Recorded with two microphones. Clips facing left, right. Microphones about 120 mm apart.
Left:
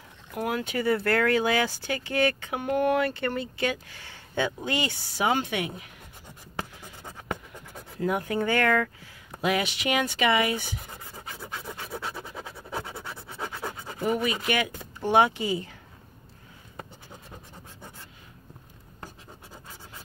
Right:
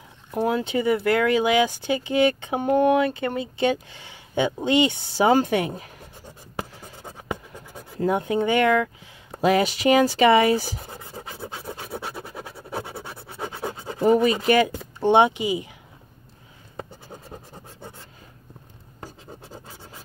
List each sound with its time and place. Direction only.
0.3 s speech: 30° right (ahead or behind)
8.0 s speech: 25° right (ahead or behind)
9.4 s scratch: 35° right (ahead or behind)
11.9 s a sound: 5° right (ahead or behind)
13.0 s a sound: 25° right (ahead or behind)
13.7 s speech: 30° right (ahead or behind)